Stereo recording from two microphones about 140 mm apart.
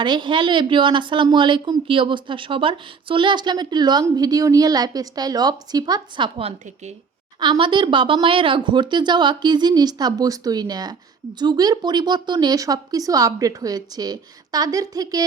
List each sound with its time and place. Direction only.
0.0 s a woman's voice: 30° right (ahead or behind)